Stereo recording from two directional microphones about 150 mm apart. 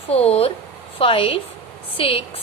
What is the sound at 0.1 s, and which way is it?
A woman's voice, 45° left (ahead or behind).